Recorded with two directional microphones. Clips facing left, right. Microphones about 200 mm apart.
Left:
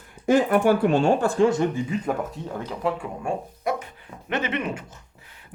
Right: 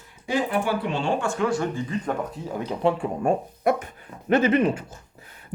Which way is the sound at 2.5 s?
15° right (ahead or behind).